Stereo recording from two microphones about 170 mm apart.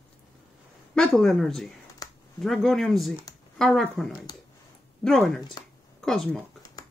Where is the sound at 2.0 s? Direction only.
20° left (ahead or behind).